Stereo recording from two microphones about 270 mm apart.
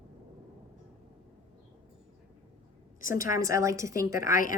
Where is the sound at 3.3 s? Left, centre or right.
Centre.